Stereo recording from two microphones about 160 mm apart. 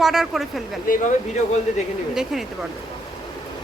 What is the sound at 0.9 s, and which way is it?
Speech, 60° left (ahead or behind).